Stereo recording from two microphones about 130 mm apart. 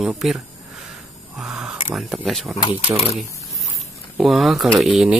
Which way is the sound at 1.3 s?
5° right (ahead or behind).